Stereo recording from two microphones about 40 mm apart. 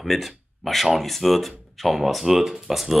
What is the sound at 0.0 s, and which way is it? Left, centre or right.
Speech, centre.